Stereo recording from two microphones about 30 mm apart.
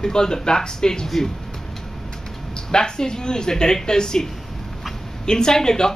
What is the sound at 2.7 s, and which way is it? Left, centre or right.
Speech, left.